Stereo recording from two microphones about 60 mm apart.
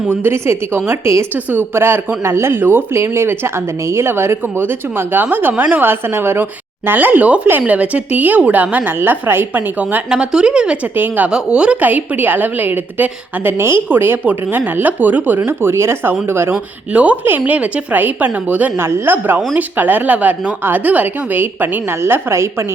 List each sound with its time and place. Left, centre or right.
0.1 s speech: right
0.9 s speech: right
1.7 s speech: right
2.9 s a woman's voice: right
10.1 s speech: centre
10.9 s speech: right
11.3 s speech: centre
11.8 s a woman's voice: right
15.4 s speech: right
16.9 s a woman's voice: right
18.8 s speech: right